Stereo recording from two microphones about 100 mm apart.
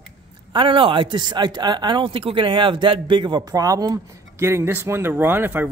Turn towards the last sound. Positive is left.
turn(degrees=-20)  # may be behind; listen again after turning